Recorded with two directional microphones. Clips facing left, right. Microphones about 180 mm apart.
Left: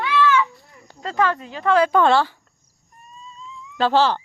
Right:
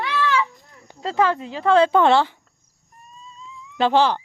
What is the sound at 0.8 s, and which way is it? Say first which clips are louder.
Speech: right 1 dB; 20° right (ahead or behind).